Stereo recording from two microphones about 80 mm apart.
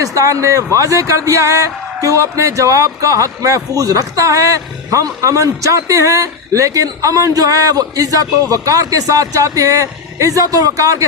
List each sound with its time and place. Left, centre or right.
0.0 s speech: right